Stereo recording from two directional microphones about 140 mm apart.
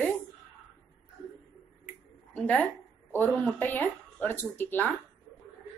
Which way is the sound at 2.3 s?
10° left (ahead or behind).